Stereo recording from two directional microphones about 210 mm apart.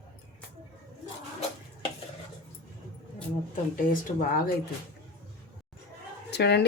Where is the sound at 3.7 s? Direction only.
40° left (ahead or behind).